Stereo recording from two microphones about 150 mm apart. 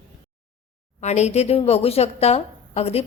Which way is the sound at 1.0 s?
50° left (ahead or behind).